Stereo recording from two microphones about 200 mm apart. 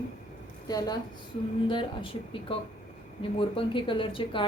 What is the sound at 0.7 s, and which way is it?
A woman's voice, 20° left (ahead or behind).